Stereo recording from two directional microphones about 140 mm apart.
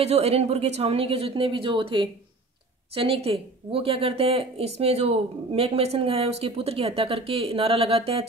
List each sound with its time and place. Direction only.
0.0 s speech: 45° right (ahead or behind)